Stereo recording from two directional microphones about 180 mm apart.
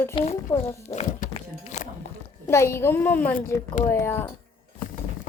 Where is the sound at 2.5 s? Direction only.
15° left (ahead or behind).